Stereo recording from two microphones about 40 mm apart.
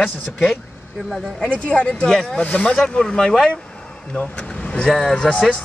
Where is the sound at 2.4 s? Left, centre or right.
Left.